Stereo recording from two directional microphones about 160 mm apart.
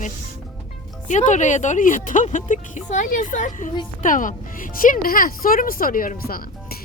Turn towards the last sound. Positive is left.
turn(degrees=65)  # may be behind; listen again after turning